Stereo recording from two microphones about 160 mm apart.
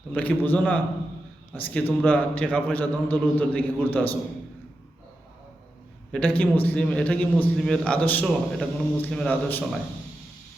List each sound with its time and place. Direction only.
0.1 s a man's voice: 10° left (ahead or behind)
6.1 s a man's voice: 5° left (ahead or behind)